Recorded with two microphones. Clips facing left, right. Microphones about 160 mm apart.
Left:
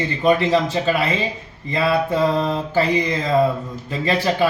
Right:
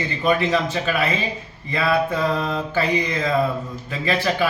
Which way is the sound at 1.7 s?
30° left (ahead or behind).